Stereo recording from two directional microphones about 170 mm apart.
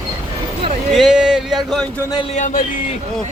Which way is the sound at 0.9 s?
5° right (ahead or behind).